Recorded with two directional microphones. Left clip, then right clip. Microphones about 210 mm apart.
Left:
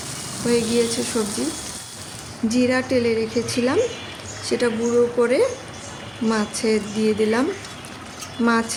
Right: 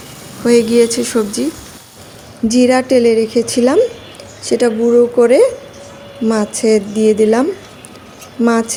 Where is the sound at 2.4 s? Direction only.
25° right (ahead or behind).